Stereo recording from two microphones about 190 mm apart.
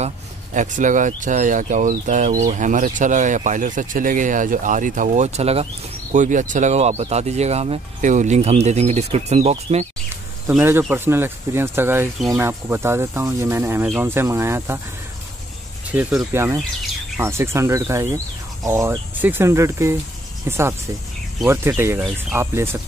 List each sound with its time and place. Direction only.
0.6 s speech: 40° right (ahead or behind)
10.5 s speech: 10° right (ahead or behind)
15.9 s speech: 10° right (ahead or behind)